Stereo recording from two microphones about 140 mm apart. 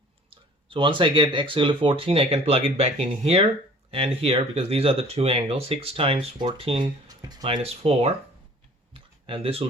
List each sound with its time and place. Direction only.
0.7 s speech: 35° right (ahead or behind)
7.1 s speech: 25° right (ahead or behind)
7.4 s speech: 45° right (ahead or behind)
8.9 s a sound: 40° right (ahead or behind)